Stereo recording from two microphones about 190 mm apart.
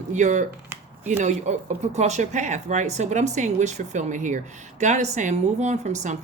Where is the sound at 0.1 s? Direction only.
40° right (ahead or behind).